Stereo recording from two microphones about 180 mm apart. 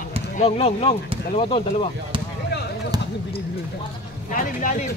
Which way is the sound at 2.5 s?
65° left (ahead or behind).